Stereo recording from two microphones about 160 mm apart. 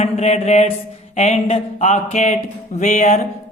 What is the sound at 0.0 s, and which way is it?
Speech, 45° left (ahead or behind).